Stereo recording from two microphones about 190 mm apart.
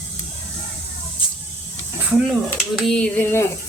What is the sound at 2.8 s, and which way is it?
Speech, 5° left (ahead or behind).